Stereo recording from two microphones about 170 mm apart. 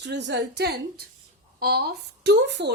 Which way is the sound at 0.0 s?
90° right.